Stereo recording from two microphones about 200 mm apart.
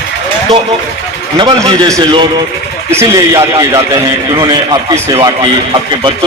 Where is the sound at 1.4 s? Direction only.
20° right (ahead or behind).